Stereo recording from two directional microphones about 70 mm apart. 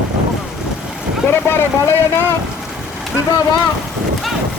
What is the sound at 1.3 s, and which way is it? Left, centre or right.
Speech, left.